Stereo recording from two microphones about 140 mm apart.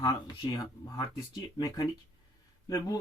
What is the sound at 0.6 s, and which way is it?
Speech, 30° left (ahead or behind).